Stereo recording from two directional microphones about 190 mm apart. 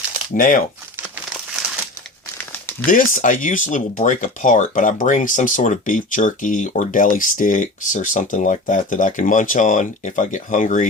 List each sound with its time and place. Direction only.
0.3 s speech: 45° left (ahead or behind)
2.8 s speech: 45° left (ahead or behind)